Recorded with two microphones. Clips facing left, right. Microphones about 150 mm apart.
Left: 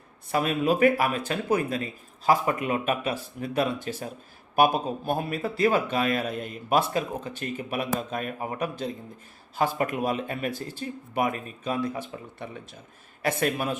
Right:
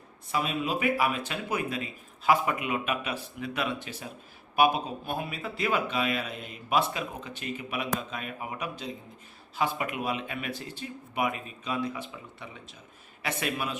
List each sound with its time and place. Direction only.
0.3 s a man's voice: 50° left (ahead or behind)